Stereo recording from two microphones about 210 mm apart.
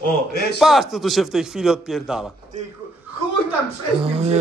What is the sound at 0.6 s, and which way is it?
A man's voice, centre (ahead or behind).